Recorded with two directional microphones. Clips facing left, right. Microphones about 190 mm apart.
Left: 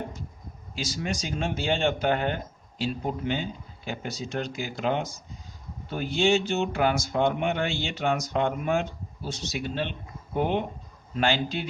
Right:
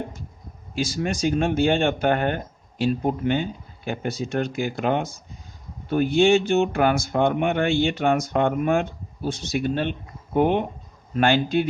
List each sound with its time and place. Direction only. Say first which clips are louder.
0.8 s speech: right 7 dB; 55° right (ahead or behind)